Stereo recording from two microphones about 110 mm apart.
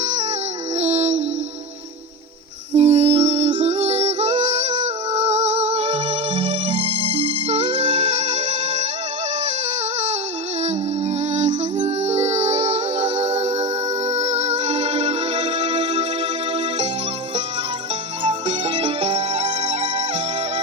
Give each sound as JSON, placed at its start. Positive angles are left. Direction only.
{"t": 0.0, "sound": "music", "side_deg": -90}
{"t": 2.7, "sound": "music", "side_deg": -75}
{"t": 6.7, "sound": "music", "side_deg": -60}
{"t": 10.6, "sound": "music", "side_deg": -90}
{"t": 18.4, "sound": "music", "side_deg": -80}
{"t": 19.3, "sound": "music", "side_deg": -60}